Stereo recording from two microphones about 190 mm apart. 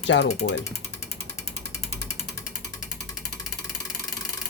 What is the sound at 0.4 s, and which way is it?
Speech, 55° left (ahead or behind).